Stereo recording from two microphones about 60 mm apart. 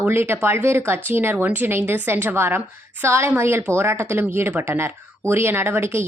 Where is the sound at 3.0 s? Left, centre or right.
Right.